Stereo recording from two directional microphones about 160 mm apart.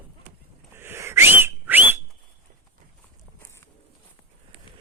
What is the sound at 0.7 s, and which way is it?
Whistling, 15° right (ahead or behind).